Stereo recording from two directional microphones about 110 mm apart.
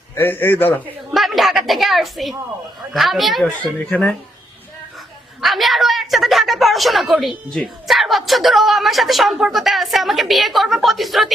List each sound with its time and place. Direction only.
0.2 s a man's voice: 20° left (ahead or behind)
1.1 s a woman's voice: centre (ahead or behind)
5.4 s a woman's voice: centre (ahead or behind)